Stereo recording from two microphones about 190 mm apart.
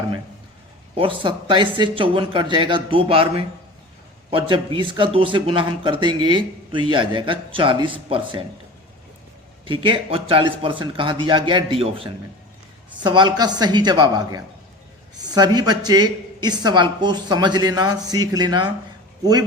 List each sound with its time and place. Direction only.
0.9 s a woman's voice: 25° right (ahead or behind)
9.6 s a woman's voice: 25° right (ahead or behind)